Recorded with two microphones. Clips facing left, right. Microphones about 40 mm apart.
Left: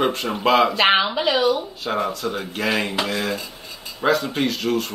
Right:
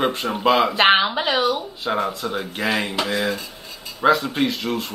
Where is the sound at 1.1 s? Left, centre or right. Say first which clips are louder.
Left 1 dB; right.